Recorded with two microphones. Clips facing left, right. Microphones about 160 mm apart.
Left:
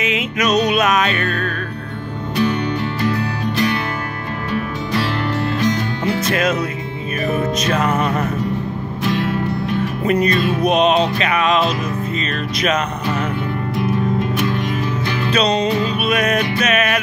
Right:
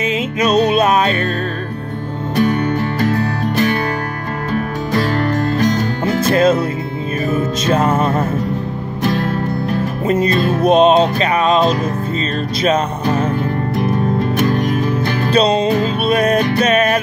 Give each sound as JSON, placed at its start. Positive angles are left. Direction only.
{"t": 0.0, "sound": "music", "side_deg": -30}
{"t": 2.3, "sound": "music", "side_deg": -45}
{"t": 6.3, "sound": "music", "side_deg": -30}
{"t": 7.6, "sound": "music", "side_deg": -25}
{"t": 9.0, "sound": "music", "side_deg": -45}
{"t": 10.0, "sound": "music", "side_deg": -25}
{"t": 14.3, "sound": "music", "side_deg": -45}
{"t": 15.3, "sound": "music", "side_deg": -30}